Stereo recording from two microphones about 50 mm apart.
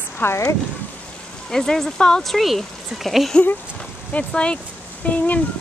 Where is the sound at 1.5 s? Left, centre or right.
Centre.